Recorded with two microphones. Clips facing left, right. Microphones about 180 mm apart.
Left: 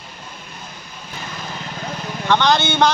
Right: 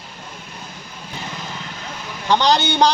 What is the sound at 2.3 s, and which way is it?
Speech, 35° right (ahead or behind).